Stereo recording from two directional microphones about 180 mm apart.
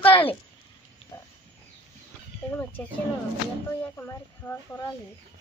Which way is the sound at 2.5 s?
10° left (ahead or behind).